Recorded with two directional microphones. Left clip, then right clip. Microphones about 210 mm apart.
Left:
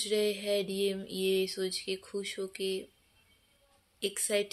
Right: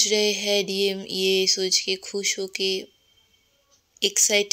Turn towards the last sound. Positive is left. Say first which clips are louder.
# right 11 dB
turn(degrees=-35)  # may be behind; listen again after turning